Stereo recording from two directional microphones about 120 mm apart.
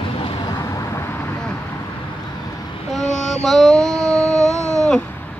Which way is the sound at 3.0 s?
80° left.